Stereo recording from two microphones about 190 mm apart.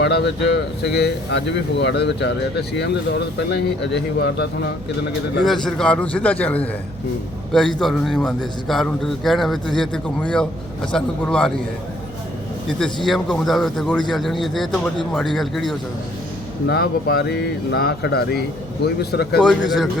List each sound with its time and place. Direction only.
0.0 s speech: 60° left (ahead or behind)
5.5 s a man's voice: 5° left (ahead or behind)
12.6 s a man's voice: centre (ahead or behind)
16.6 s speech: 55° left (ahead or behind)